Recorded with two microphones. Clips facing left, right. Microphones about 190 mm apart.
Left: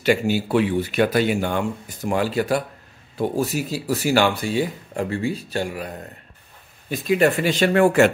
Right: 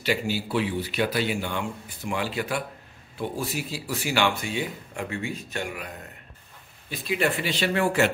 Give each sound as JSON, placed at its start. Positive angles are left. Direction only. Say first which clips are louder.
{"t": 0.0, "sound": "speech", "louder": "left 7 dB", "side_deg": 50}
{"t": 6.9, "sound": "speech", "louder": "left 8 dB", "side_deg": 45}